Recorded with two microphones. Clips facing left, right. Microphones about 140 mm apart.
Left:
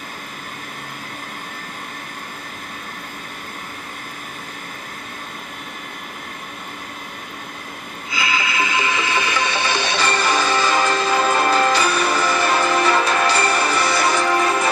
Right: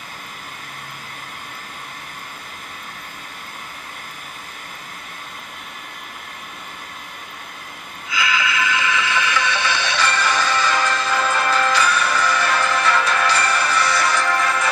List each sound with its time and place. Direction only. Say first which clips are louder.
8.1 s music: right 1 dB; 35° left (ahead or behind)